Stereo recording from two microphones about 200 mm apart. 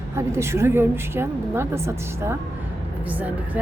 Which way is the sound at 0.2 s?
15° right (ahead or behind).